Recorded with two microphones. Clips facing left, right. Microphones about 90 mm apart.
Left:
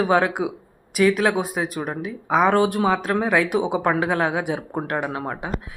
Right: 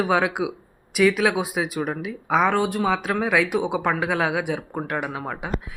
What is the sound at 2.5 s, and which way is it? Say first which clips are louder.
Speech: left 4 dB; 55° left (ahead or behind).